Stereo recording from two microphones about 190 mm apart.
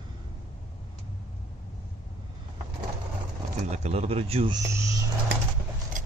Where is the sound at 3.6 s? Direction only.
35° right (ahead or behind).